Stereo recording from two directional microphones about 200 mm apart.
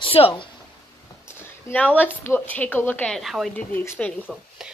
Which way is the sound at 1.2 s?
10° left (ahead or behind).